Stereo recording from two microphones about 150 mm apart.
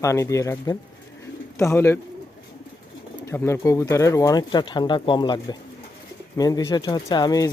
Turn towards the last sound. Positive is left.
turn(degrees=25)  # may be behind; listen again after turning